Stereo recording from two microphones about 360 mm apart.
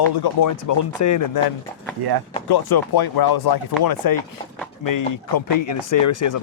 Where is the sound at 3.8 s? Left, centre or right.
Left.